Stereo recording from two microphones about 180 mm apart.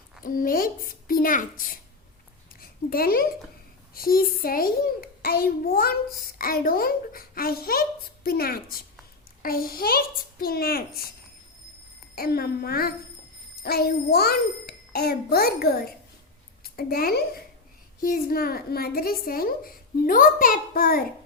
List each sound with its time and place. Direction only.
0.2 s a woman's voice: 50° left (ahead or behind)
12.1 s a child's voice: 60° left (ahead or behind)